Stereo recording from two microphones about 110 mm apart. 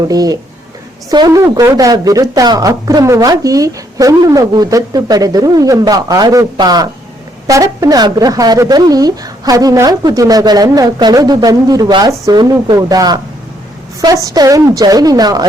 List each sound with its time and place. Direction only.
0.1 s speech: 35° right (ahead or behind)